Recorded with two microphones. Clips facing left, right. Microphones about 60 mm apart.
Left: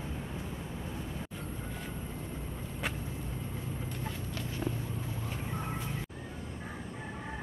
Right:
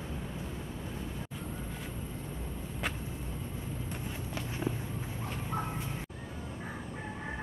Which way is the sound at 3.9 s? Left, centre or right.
Centre.